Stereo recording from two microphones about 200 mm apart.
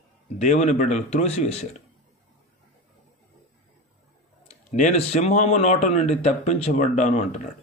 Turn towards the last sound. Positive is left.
turn(degrees=35)  # may be behind; listen again after turning